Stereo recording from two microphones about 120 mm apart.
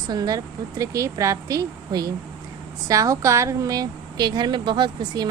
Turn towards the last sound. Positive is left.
turn(degrees=-40)  # may be behind; listen again after turning